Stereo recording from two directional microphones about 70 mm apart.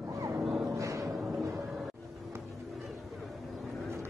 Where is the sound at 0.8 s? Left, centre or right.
Right.